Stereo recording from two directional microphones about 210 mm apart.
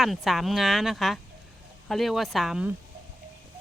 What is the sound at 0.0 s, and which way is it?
Speech, centre (ahead or behind).